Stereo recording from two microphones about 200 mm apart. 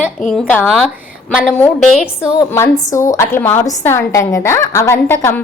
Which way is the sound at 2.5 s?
15° left (ahead or behind).